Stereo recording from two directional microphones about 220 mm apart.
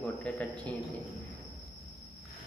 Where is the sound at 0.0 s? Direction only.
Centre (ahead or behind).